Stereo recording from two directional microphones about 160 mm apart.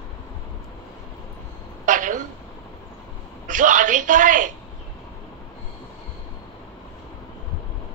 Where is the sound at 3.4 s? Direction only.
55° right (ahead or behind).